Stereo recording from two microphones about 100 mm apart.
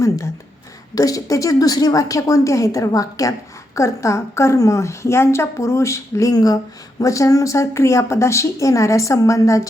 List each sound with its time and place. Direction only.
0.9 s a woman's voice: 35° left (ahead or behind)